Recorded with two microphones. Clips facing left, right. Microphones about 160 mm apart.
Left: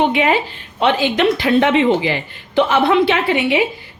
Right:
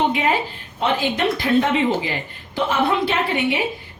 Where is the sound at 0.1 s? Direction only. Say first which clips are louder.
Left 4 dB; 75° left (ahead or behind).